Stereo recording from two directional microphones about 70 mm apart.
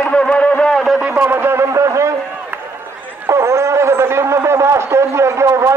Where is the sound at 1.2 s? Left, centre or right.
Right.